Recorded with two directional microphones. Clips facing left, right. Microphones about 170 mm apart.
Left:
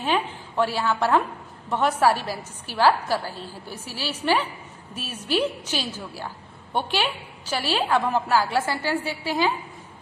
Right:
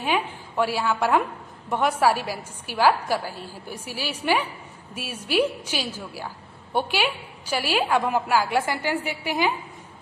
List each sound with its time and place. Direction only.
0.0 s a woman's voice: 10° right (ahead or behind)